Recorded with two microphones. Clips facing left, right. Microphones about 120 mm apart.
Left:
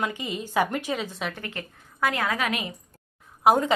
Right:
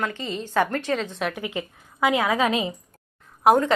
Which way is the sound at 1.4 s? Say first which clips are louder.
Right 6 dB; 15° right (ahead or behind).